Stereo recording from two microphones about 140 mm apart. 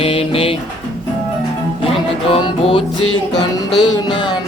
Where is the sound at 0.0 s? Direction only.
40° left (ahead or behind).